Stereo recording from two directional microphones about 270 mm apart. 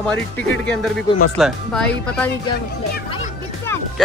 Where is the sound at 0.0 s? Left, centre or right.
Centre.